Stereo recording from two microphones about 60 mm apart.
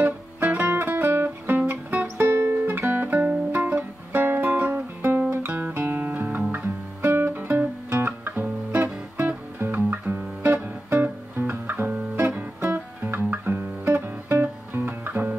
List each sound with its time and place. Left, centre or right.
0.0 s music: right
1.7 s music: right
2.1 s music: right
5.3 s music: right
6.5 s guitar: right
9.6 s music: right